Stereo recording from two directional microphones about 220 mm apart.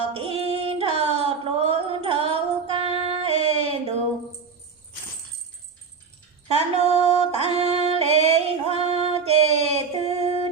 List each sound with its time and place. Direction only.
0.1 s child singing: 25° right (ahead or behind)
6.5 s female singing: 30° right (ahead or behind)